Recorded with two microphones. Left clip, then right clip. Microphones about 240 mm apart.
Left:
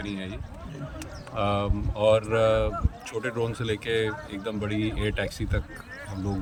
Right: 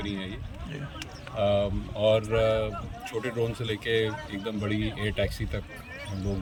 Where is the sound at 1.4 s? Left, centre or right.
Centre.